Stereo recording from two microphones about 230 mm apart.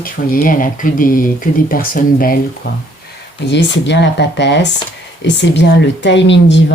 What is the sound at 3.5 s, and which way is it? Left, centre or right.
Speech, left.